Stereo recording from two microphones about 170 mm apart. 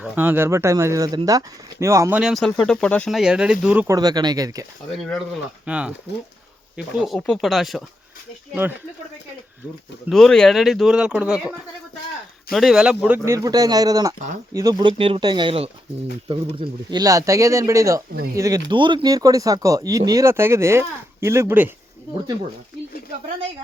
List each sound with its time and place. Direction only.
0.0 s speech: 10° right (ahead or behind); by 3.2 s 5° left (ahead or behind)
3.2 s speech: 5° right (ahead or behind)
3.8 s speech: 20° right (ahead or behind)
4.9 s speech: 5° left (ahead or behind)
10.1 s speech: centre (ahead or behind)